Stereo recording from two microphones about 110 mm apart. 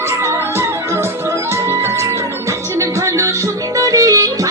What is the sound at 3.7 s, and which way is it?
Music, 30° right (ahead or behind).